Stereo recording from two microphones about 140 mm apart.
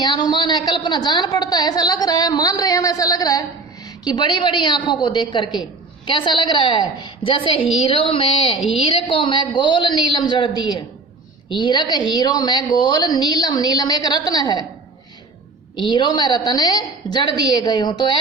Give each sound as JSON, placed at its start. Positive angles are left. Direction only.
{"t": 0.0, "sound": "a woman's voice", "side_deg": 30}
{"t": 15.7, "sound": "a woman's voice", "side_deg": 35}